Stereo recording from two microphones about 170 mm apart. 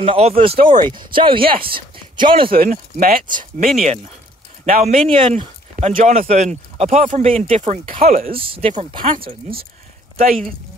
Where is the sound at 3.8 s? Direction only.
40° right (ahead or behind).